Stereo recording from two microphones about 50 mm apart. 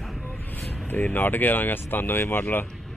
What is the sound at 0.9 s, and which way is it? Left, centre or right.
Speech, left.